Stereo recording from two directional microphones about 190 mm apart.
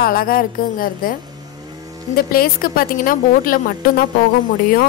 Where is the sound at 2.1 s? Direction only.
50° left (ahead or behind).